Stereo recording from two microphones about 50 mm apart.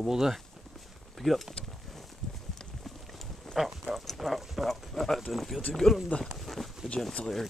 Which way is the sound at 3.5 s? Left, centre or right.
Centre.